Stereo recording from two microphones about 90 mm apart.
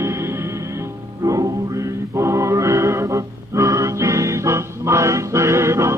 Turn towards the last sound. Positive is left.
turn(degrees=-30)  # may be behind; listen again after turning